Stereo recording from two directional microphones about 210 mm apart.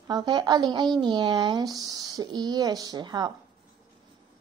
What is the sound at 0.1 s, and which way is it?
Speech, 20° right (ahead or behind).